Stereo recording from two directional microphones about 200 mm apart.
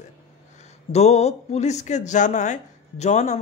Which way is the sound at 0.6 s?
35° left (ahead or behind).